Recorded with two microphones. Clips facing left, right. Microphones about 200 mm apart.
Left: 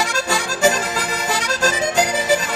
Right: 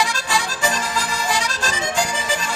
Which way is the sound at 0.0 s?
40° left (ahead or behind).